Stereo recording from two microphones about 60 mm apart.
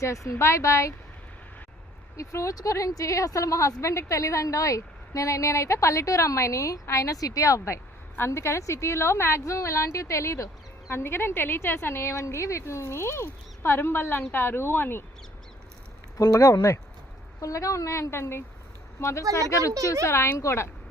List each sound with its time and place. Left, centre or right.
0.0 s a woman's voice: left
2.1 s a woman's voice: left
16.1 s a woman's voice: left
20.1 s a woman's voice: left